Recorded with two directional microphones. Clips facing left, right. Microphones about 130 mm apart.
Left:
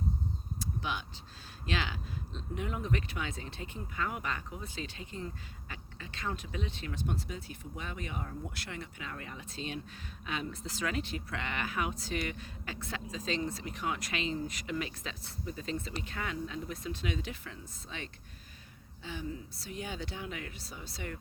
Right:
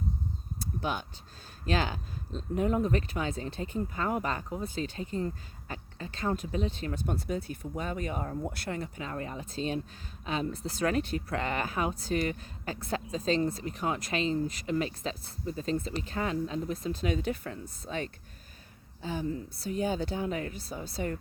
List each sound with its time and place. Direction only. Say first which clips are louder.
0.8 s speech: right 6 dB; 45° right (ahead or behind)